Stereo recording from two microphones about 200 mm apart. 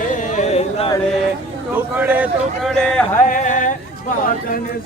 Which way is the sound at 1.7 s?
10° right (ahead or behind).